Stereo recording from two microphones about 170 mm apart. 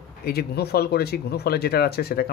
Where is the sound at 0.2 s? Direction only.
65° left (ahead or behind).